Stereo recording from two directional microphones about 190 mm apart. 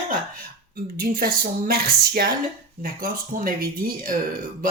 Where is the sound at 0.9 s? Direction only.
50° right (ahead or behind).